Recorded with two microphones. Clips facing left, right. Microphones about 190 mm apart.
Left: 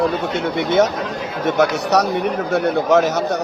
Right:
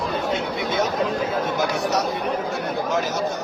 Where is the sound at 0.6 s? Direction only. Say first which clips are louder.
Left 8 dB; 70° left (ahead or behind).